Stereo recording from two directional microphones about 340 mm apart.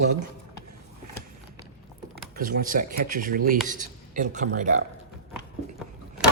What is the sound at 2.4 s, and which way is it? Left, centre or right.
Speech, right.